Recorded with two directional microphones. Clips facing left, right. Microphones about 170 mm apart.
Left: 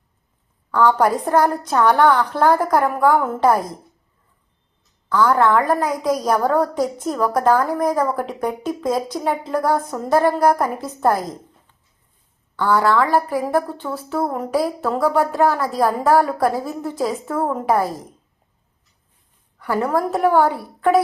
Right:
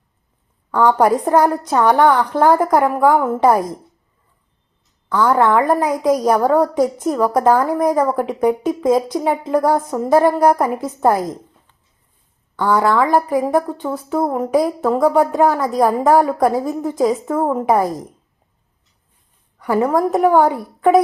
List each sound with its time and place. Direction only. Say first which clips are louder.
0.7 s a woman's voice: right 2 dB; 15° right (ahead or behind)
5.0 s a woman's voice: right 1 dB; 10° right (ahead or behind)
12.5 s a woman's voice: right 2 dB; 15° right (ahead or behind)
17.2 s a woman's voice: right 3 dB; 15° right (ahead or behind)
19.5 s a woman's voice: right 4 dB; 20° right (ahead or behind)